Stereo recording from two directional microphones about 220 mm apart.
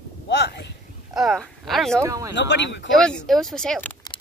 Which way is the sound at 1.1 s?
Centre (ahead or behind).